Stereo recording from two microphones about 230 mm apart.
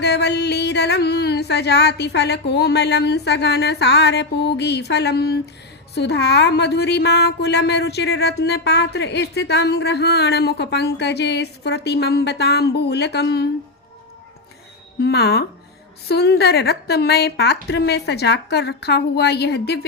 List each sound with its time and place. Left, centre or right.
0.0 s a woman's voice: left
15.0 s a woman's voice: left